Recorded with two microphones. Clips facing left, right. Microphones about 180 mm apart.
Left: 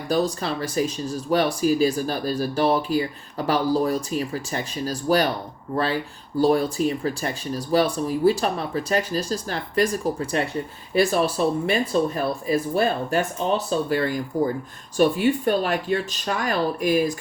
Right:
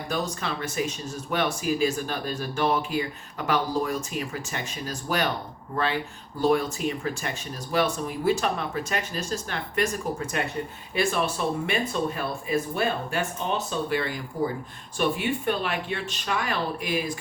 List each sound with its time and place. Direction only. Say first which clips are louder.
0.1 s speech: left 7 dB; 35° left (ahead or behind)